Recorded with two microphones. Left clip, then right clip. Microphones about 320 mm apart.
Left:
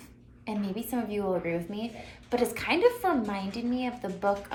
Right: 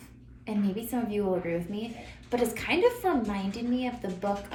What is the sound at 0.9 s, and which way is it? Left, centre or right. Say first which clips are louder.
A woman's voice: even; centre.